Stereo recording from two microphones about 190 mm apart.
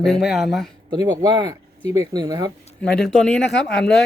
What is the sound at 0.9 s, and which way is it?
Speech, 20° right (ahead or behind).